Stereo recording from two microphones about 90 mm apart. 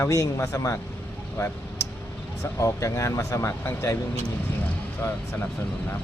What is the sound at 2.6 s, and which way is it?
A man's voice, 35° left (ahead or behind).